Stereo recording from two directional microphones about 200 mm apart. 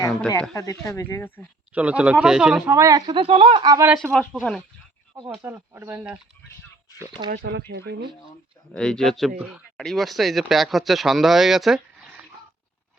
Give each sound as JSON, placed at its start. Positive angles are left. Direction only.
{"t": 0.5, "sound": "speech", "side_deg": 15}
{"t": 1.7, "sound": "speech", "side_deg": -5}
{"t": 2.6, "sound": "speech", "side_deg": -15}
{"t": 3.1, "sound": "speech", "side_deg": -30}
{"t": 3.9, "sound": "speech", "side_deg": 0}
{"t": 5.4, "sound": "speech", "side_deg": -10}
{"t": 7.3, "sound": "speech", "side_deg": -55}
{"t": 8.7, "sound": "speech", "side_deg": 5}